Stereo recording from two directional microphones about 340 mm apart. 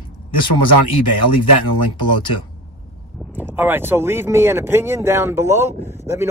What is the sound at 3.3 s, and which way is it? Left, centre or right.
Speech, centre.